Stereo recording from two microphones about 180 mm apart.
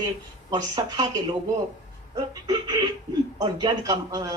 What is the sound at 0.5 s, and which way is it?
Speech, 25° right (ahead or behind).